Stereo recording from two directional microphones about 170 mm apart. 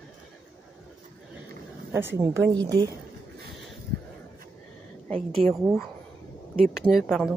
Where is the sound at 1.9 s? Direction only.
15° right (ahead or behind).